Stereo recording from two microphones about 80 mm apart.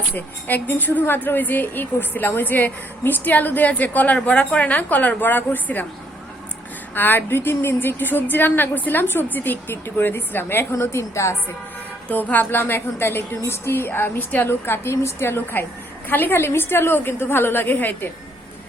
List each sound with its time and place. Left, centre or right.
0.1 s a woman's voice: left
6.9 s a woman's voice: left
12.0 s a woman's voice: left